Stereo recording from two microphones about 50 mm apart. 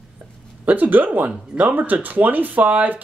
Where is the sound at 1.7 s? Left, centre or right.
Right.